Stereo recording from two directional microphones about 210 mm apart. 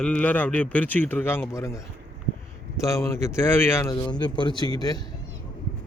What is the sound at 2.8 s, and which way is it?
Speech, 10° left (ahead or behind).